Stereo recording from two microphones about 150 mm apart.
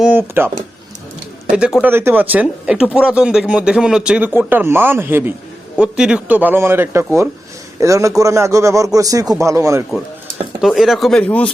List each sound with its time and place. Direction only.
0.0 s a sound: 10° right (ahead or behind)
1.5 s a man's voice: 5° right (ahead or behind)
10.6 s speech: centre (ahead or behind)